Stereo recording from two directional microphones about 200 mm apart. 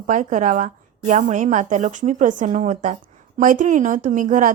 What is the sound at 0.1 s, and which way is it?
A woman's voice, 40° right (ahead or behind).